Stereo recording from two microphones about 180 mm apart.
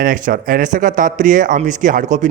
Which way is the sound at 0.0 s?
50° right (ahead or behind).